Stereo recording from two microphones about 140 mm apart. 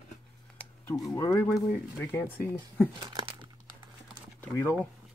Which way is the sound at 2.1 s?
15° left (ahead or behind).